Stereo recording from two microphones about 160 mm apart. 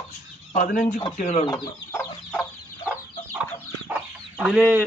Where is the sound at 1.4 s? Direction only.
20° left (ahead or behind).